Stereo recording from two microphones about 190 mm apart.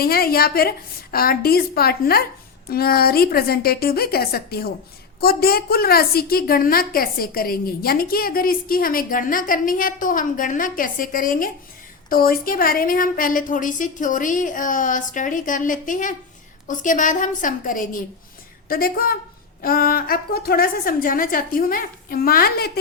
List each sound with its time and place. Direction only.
0.0 s a woman's voice: 50° left (ahead or behind)